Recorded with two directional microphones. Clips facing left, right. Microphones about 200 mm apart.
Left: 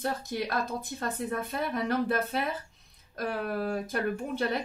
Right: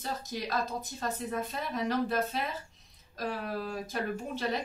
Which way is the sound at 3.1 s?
55° left (ahead or behind).